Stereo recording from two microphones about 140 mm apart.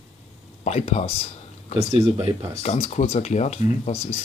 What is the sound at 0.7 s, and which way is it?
Speech, 50° left (ahead or behind).